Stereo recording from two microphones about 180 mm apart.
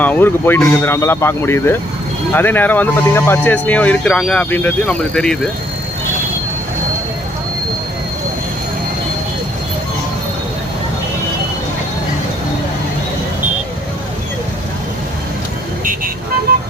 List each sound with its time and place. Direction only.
0.0 s speech: 10° left (ahead or behind)
16.5 s vehicle: 60° right (ahead or behind)